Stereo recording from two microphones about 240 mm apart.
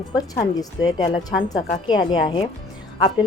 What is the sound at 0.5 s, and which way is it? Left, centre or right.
A woman's voice, centre.